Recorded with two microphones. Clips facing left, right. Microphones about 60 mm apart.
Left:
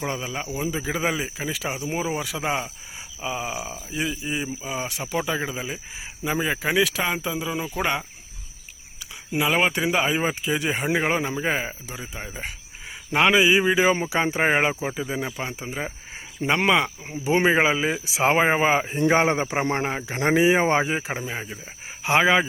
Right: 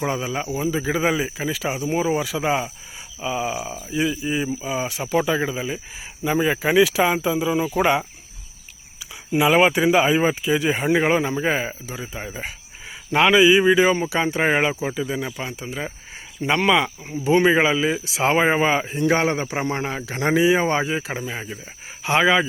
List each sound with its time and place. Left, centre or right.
0.0 s speech: centre
9.3 s speech: centre
16.4 s speech: left
17.1 s speech: centre
18.9 s speech: left
19.9 s speech: centre
20.2 s speech: left
21.1 s speech: centre